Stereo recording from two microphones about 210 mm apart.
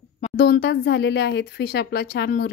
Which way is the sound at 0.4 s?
45° left (ahead or behind).